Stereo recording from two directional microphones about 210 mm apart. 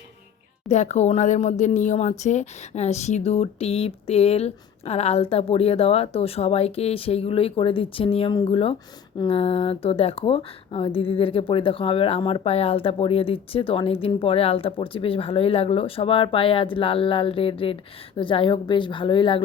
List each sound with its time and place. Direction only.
0.7 s speech: 35° left (ahead or behind)